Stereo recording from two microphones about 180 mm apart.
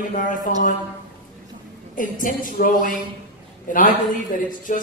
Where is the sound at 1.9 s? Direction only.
50° left (ahead or behind).